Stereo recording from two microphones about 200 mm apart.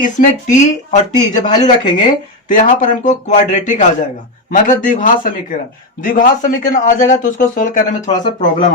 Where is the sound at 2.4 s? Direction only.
40° left (ahead or behind).